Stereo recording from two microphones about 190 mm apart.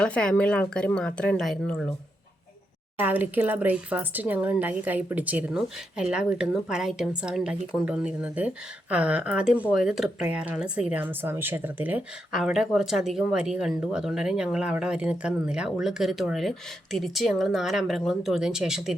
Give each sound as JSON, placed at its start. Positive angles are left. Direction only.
{"t": 0.0, "sound": "a woman's voice", "side_deg": 5}
{"t": 3.0, "sound": "a woman's voice", "side_deg": -10}